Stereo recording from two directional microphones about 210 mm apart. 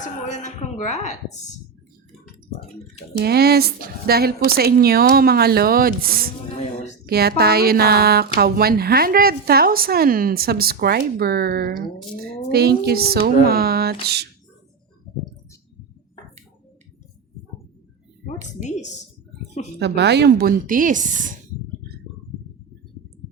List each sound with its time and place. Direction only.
0.0 s a woman's voice: 35° left (ahead or behind)
3.2 s speech: 50° right (ahead or behind)
18.4 s a woman's voice: 35° left (ahead or behind)
19.8 s speech: 55° right (ahead or behind); by 21.3 s 40° right (ahead or behind)